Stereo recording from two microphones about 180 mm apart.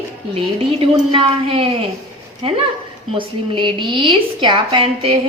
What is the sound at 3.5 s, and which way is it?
A woman's voice, 25° right (ahead or behind).